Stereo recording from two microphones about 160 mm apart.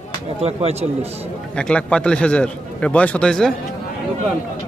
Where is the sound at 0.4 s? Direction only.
40° right (ahead or behind).